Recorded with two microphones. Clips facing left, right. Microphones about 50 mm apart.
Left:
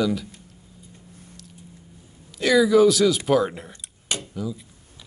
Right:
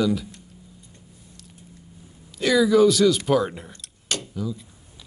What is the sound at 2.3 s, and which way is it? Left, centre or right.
Speech, centre.